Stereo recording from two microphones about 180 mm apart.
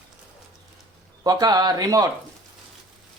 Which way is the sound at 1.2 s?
20° right (ahead or behind).